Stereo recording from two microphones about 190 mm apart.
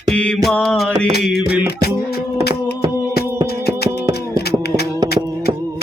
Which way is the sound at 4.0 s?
60° left (ahead or behind).